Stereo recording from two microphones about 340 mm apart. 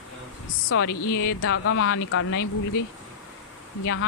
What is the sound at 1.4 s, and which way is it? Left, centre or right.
Speech, left.